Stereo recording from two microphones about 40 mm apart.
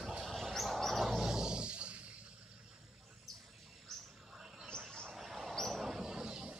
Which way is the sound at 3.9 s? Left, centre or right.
Centre.